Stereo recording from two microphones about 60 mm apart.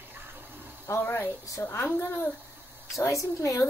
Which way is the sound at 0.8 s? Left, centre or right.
Left.